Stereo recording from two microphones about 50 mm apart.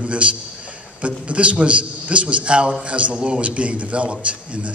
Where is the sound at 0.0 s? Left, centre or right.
Right.